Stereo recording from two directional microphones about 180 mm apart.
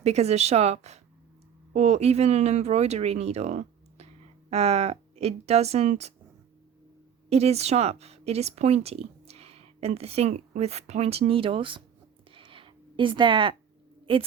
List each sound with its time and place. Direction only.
0.0 s a woman's voice: 35° right (ahead or behind)
7.3 s speech: 35° right (ahead or behind)
12.3 s a sound: 30° right (ahead or behind)
14.1 s a woman's voice: 25° right (ahead or behind)